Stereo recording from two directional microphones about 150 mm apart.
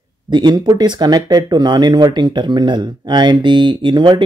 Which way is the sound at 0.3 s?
30° right (ahead or behind).